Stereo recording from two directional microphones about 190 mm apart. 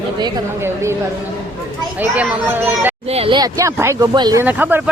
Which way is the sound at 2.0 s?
10° right (ahead or behind).